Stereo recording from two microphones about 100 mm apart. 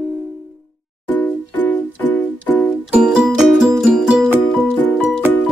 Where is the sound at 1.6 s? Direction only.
15° left (ahead or behind).